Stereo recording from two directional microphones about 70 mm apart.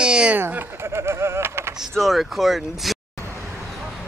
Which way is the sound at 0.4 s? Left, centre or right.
Right.